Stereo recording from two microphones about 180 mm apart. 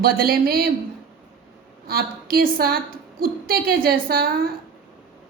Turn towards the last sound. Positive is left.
turn(degrees=-60)  # may be behind; listen again after turning